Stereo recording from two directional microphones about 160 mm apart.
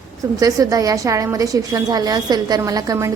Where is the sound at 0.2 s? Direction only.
20° right (ahead or behind).